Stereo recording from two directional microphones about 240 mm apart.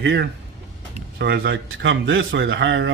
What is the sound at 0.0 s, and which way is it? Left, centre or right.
Speech, right.